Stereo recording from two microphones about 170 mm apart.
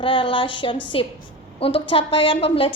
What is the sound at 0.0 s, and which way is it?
A woman's voice, 30° left (ahead or behind).